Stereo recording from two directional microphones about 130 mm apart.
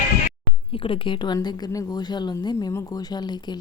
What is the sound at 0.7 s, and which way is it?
Speech, 45° left (ahead or behind).